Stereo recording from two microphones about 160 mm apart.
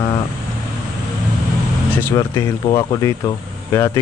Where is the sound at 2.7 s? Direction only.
35° left (ahead or behind).